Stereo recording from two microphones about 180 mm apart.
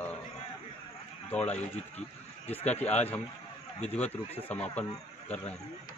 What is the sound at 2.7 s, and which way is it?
A man's voice, 10° left (ahead or behind).